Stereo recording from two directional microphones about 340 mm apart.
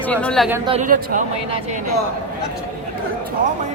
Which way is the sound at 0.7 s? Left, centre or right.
Right.